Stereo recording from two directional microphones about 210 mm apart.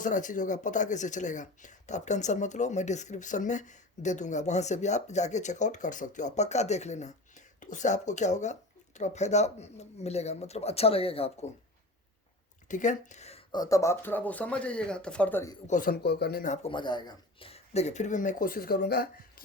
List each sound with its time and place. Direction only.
0.0 s speech: 35° left (ahead or behind)
12.6 s speech: 35° left (ahead or behind); by 15.5 s 10° left (ahead or behind)
15.6 s speech: 40° left (ahead or behind)
16.7 s speech: 20° left (ahead or behind); by 19.0 s 45° left (ahead or behind)